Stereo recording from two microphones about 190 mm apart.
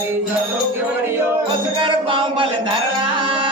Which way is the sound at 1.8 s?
25° right (ahead or behind).